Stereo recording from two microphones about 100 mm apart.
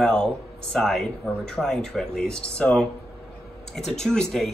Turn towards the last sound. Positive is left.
turn(degrees=5)  # may be behind; listen again after turning